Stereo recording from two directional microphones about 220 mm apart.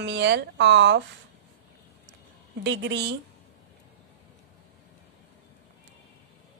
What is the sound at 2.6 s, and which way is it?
Speech, 50° right (ahead or behind).